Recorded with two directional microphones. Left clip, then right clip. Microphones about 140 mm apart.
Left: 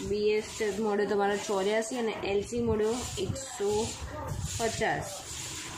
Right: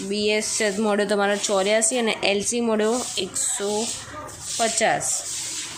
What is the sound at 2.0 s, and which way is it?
Speech, 65° right (ahead or behind).